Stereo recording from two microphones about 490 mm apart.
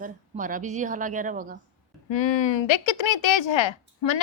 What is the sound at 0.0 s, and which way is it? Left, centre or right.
A woman's voice, centre.